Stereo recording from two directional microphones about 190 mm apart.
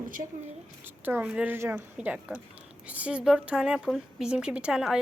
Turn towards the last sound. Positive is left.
turn(degrees=-5)  # may be behind; listen again after turning